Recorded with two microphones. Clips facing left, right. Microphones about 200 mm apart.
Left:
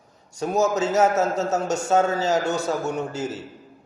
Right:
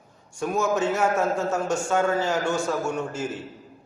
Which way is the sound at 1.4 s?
40° left (ahead or behind).